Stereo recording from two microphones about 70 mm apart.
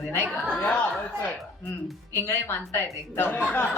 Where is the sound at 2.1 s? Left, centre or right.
Left.